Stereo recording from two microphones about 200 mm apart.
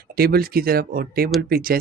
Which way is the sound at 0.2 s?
50° right (ahead or behind).